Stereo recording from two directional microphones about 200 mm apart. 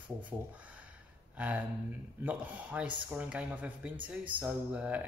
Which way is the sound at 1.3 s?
5° right (ahead or behind).